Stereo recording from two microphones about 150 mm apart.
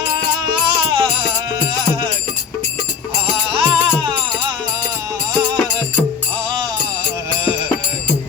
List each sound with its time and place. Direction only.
0.6 s music: 35° right (ahead or behind)
3.5 s music: 35° right (ahead or behind)